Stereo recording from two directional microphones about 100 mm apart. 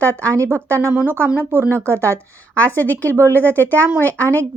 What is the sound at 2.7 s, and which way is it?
Speech, 20° left (ahead or behind).